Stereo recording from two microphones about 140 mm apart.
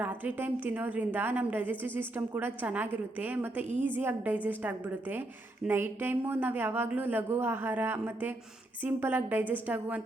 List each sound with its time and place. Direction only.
0.0 s speech: 10° right (ahead or behind)